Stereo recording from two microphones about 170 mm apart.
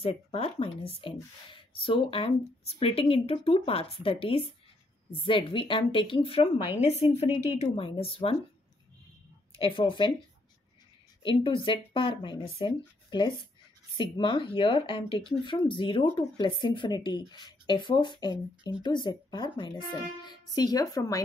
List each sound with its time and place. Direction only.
0.0 s speech: 35° left (ahead or behind)
9.6 s speech: 30° left (ahead or behind)
11.2 s speech: 30° left (ahead or behind)